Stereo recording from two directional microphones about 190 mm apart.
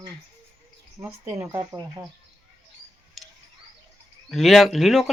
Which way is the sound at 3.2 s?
Centre (ahead or behind).